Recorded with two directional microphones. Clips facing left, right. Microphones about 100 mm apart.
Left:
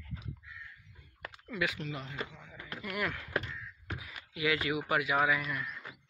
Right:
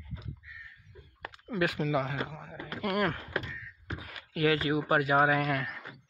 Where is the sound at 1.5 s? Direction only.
45° right (ahead or behind).